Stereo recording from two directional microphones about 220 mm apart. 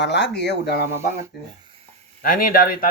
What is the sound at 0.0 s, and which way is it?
Speech, 50° left (ahead or behind).